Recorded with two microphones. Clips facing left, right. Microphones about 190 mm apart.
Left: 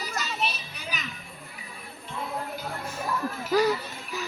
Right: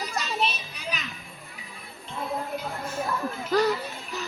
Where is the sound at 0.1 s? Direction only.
30° right (ahead or behind).